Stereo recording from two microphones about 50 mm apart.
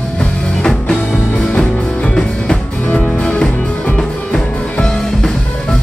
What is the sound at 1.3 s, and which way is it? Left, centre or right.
Music, centre.